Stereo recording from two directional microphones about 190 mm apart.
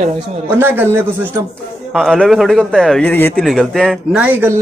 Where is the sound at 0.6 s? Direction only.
10° right (ahead or behind).